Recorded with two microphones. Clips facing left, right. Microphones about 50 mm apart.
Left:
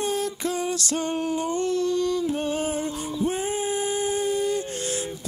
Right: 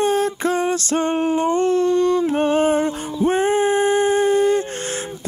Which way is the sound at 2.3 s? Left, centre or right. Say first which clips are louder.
Right 9 dB; right.